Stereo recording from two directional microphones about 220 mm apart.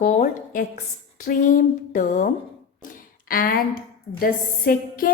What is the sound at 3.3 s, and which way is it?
A woman's voice, 40° left (ahead or behind).